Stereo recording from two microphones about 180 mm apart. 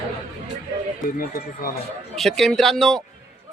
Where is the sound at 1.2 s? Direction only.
55° left (ahead or behind).